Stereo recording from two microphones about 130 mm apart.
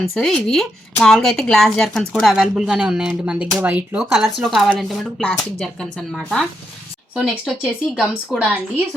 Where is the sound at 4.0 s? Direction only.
Centre (ahead or behind).